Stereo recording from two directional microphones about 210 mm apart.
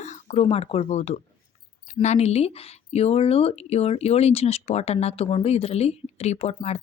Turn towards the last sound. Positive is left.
turn(degrees=30)  # may be behind; listen again after turning